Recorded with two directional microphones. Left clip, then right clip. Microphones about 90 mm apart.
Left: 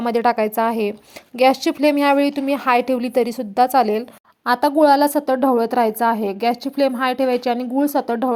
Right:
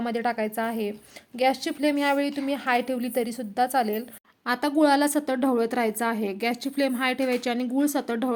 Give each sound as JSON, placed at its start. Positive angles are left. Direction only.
{"t": 0.0, "sound": "a woman's voice", "side_deg": 55}
{"t": 4.4, "sound": "a woman's voice", "side_deg": 35}
{"t": 4.8, "sound": "a woman's voice", "side_deg": 25}